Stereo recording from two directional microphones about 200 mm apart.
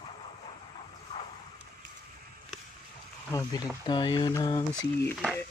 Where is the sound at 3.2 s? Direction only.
15° left (ahead or behind).